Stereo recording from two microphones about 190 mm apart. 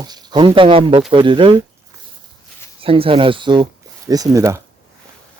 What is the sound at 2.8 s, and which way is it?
Speech, 30° right (ahead or behind).